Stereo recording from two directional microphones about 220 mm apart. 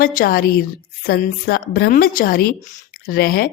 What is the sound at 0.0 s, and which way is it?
A woman's voice, 40° left (ahead or behind).